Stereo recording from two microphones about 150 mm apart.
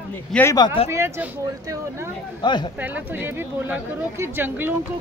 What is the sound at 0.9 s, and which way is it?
Speech, 15° right (ahead or behind).